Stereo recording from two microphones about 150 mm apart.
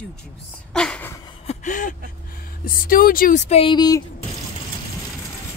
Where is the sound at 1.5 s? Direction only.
55° left (ahead or behind).